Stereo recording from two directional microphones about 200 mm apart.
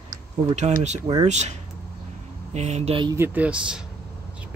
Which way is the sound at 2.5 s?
35° right (ahead or behind).